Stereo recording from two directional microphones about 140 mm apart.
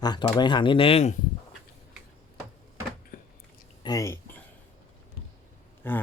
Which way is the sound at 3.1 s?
90° left.